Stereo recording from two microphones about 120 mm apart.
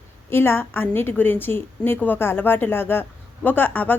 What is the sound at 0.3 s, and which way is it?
A woman's voice, 20° left (ahead or behind).